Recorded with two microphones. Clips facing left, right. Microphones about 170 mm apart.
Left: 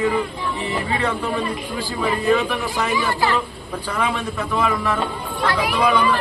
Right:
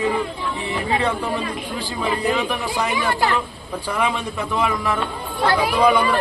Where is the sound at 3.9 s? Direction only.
15° right (ahead or behind).